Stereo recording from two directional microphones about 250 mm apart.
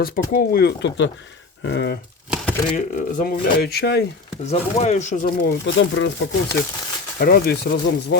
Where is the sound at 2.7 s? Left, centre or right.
Left.